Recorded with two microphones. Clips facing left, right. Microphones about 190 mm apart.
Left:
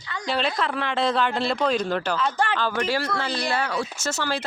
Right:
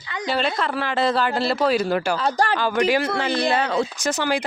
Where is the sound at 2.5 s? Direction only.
15° right (ahead or behind).